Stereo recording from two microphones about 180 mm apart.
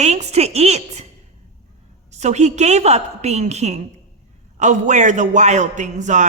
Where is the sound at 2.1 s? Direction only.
40° right (ahead or behind).